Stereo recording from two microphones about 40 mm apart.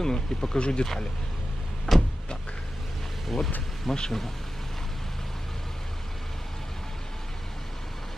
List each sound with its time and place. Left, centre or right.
0.0 s speech: centre
1.9 s vehicle: centre
3.3 s speech: centre